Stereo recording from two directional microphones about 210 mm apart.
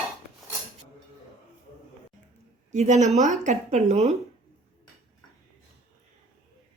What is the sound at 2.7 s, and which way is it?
A woman's voice, 35° right (ahead or behind).